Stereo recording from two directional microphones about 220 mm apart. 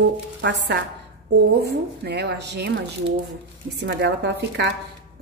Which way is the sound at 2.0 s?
50° right (ahead or behind).